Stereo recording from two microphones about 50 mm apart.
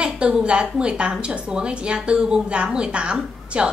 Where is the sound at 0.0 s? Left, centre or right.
Right.